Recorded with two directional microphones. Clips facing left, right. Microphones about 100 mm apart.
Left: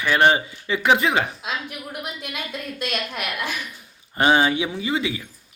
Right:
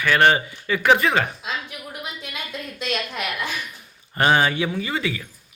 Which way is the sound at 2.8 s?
10° left (ahead or behind).